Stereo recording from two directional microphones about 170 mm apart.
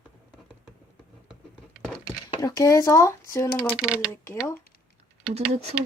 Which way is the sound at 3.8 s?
5° right (ahead or behind).